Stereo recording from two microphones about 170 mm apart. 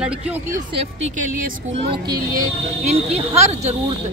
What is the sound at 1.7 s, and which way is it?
Speech, 35° right (ahead or behind).